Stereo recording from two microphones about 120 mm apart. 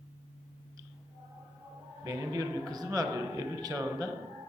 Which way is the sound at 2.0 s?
30° right (ahead or behind).